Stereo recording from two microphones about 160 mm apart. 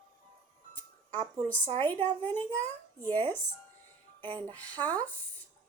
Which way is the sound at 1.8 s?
10° left (ahead or behind).